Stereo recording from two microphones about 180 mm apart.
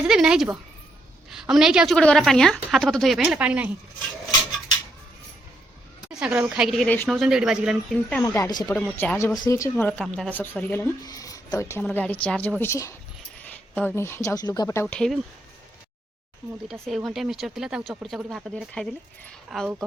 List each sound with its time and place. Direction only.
0.1 s a woman's voice: 5° right (ahead or behind)
6.1 s a woman's voice: 5° right (ahead or behind); by 7.2 s 10° left (ahead or behind)
7.2 s a woman's voice: 5° right (ahead or behind)
8.2 s speech: 20° left (ahead or behind)
13.4 s a sound: 10° left (ahead or behind)
14.3 s speech: 20° left (ahead or behind); by 15.2 s 5° left (ahead or behind)
16.8 s a woman's voice: centre (ahead or behind)